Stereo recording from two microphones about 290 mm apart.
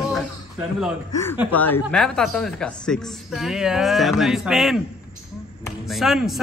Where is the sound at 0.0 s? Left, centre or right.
Centre.